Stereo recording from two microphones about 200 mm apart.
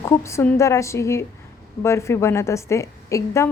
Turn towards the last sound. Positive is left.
turn(degrees=15)  # may be behind; listen again after turning